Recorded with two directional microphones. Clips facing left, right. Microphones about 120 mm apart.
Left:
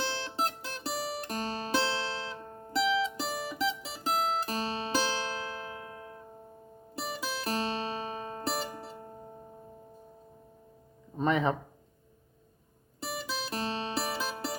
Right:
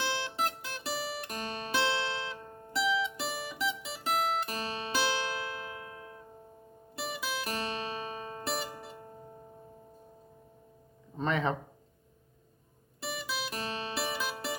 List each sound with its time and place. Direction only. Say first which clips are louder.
0.3 s music: left 1 dB; 35° left (ahead or behind)
11.2 s a sound: left 3 dB; 15° left (ahead or behind)
13.0 s music: left 1 dB; 35° left (ahead or behind)